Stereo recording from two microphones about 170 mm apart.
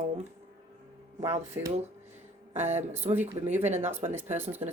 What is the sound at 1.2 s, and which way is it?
Speech, 15° right (ahead or behind).